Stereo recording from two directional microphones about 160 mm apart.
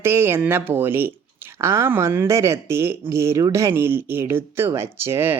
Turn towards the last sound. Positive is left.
turn(degrees=-15)  # may be behind; listen again after turning